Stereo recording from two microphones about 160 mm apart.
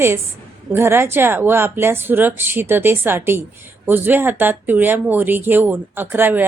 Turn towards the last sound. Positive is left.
turn(degrees=-10)  # may be behind; listen again after turning